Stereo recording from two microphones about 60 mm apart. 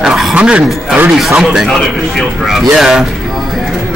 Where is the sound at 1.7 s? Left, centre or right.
Centre.